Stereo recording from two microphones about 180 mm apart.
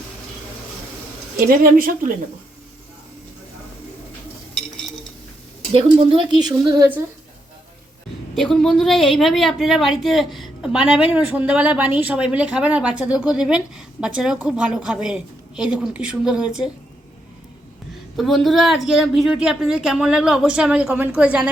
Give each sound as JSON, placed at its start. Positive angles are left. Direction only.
{"t": 1.5, "sound": "speech", "side_deg": -50}
{"t": 5.7, "sound": "a woman's voice", "side_deg": -30}
{"t": 8.4, "sound": "a woman's voice", "side_deg": 5}
{"t": 18.2, "sound": "a woman's voice", "side_deg": 0}